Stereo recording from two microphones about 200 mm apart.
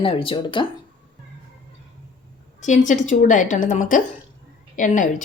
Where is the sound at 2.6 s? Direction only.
40° left (ahead or behind).